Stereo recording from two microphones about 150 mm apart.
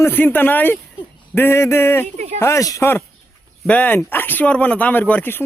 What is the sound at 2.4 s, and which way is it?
A man's voice, 20° left (ahead or behind).